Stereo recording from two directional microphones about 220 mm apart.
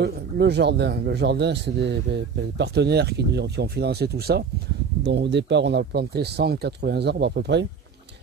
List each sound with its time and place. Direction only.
0.0 s a man's voice: 50° right (ahead or behind)